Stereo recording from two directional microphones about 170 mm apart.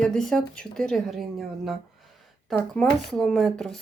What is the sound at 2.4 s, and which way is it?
Speech, 5° left (ahead or behind).